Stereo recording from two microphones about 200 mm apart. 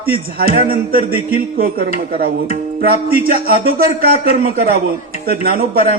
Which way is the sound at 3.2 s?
45° right (ahead or behind).